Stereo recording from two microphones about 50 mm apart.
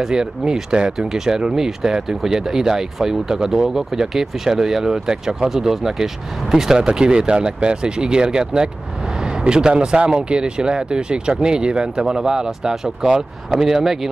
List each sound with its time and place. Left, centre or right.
0.0 s speech: centre